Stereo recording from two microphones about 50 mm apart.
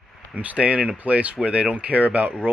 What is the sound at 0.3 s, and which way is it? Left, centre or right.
Speech, right.